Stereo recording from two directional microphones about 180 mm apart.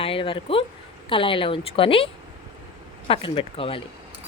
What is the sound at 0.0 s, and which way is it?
Speech, 30° left (ahead or behind).